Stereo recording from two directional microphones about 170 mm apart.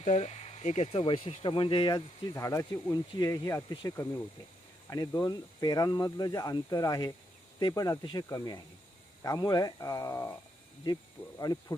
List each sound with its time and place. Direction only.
0.0 s speech: 40° left (ahead or behind); by 10.3 s 20° left (ahead or behind)